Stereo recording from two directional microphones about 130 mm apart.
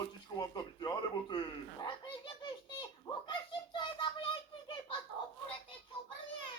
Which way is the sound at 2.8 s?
35° left (ahead or behind).